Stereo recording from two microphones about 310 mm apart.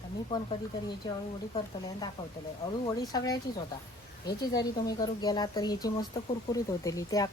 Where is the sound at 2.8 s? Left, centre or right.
Centre.